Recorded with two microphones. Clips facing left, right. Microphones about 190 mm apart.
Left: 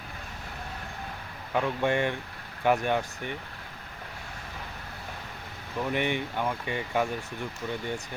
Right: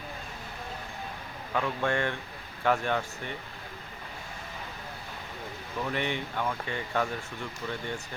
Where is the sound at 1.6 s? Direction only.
15° left (ahead or behind).